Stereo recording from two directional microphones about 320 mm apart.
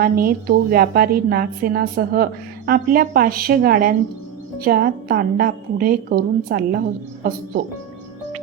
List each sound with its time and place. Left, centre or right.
0.0 s a woman's voice: right